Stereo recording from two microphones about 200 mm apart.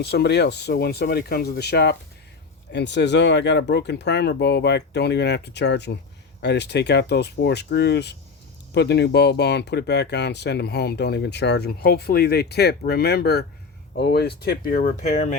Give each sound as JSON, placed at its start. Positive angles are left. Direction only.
{"t": 0.0, "sound": "speech", "side_deg": 55}